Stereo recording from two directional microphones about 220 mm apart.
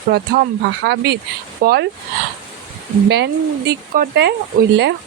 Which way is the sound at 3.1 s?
50° right (ahead or behind).